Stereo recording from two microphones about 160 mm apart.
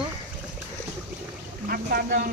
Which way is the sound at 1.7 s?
65° right (ahead or behind).